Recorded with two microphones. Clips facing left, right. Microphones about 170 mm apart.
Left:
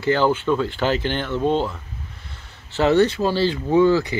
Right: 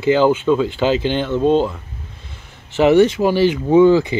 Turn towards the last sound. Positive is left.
turn(degrees=-20)  # may be behind; listen again after turning